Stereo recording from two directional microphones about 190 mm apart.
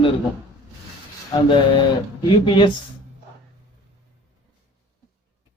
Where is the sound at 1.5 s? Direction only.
25° left (ahead or behind).